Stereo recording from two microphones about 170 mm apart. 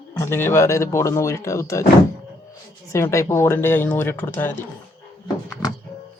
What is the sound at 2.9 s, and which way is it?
A woman's voice, 15° left (ahead or behind).